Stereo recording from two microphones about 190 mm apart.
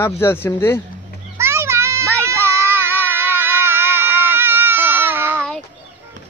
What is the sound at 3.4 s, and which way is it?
Baby cry, 10° right (ahead or behind).